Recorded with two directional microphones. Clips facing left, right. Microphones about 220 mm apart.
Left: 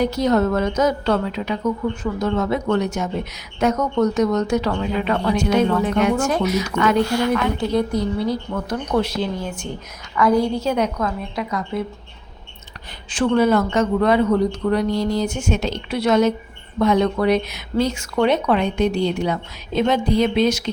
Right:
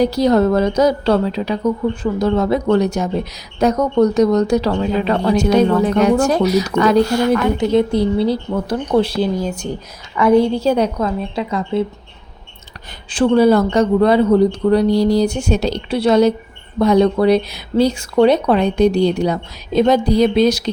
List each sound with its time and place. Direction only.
0.0 s speech: 35° right (ahead or behind)
7.6 s speech: 25° right (ahead or behind); by 9.6 s 40° right (ahead or behind)
10.2 s a woman's voice: 25° right (ahead or behind)
13.1 s speech: 35° right (ahead or behind)